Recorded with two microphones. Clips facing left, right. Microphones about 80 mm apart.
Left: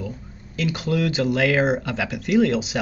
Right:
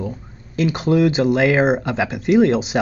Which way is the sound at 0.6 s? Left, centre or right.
Right.